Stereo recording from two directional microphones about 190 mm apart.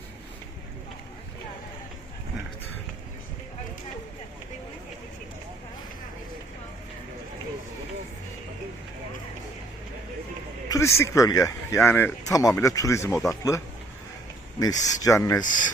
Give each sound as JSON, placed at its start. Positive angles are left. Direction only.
{"t": 10.7, "sound": "speech", "side_deg": 15}
{"t": 14.6, "sound": "speech", "side_deg": 20}